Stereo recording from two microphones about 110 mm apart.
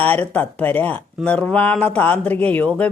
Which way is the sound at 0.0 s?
15° left (ahead or behind).